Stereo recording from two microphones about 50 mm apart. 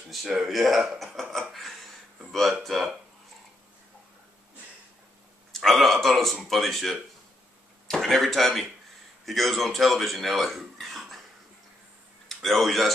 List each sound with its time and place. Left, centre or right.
0.5 s speech: centre
5.5 s speech: centre
12.3 s speech: centre